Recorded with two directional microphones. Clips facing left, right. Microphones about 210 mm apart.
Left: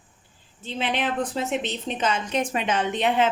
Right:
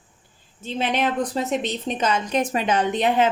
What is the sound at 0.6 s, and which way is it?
A woman's voice, 45° right (ahead or behind).